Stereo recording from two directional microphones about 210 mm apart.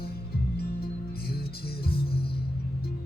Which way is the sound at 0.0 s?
50° left (ahead or behind).